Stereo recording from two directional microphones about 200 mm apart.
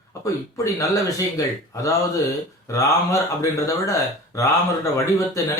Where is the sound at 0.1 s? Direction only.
15° left (ahead or behind).